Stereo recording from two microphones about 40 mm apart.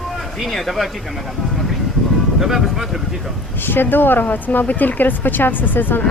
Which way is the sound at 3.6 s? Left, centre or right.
Left.